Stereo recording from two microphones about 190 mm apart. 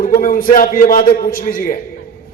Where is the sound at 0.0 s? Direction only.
45° left (ahead or behind).